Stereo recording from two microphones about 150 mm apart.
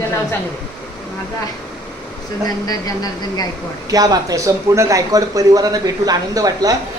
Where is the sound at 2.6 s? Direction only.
25° left (ahead or behind).